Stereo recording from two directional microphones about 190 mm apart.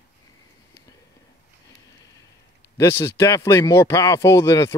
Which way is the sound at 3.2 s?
15° left (ahead or behind).